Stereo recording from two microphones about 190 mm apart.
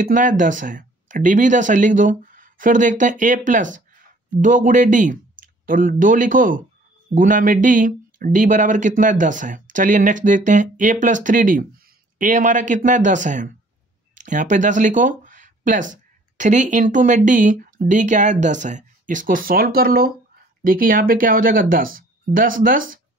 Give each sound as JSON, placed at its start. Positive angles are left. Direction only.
{"t": 0.0, "sound": "speech", "side_deg": -45}